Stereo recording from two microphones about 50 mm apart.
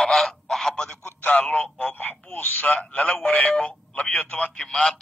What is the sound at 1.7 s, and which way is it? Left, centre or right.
Speech, left.